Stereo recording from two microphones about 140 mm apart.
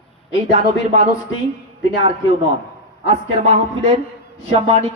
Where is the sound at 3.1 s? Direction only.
50° right (ahead or behind).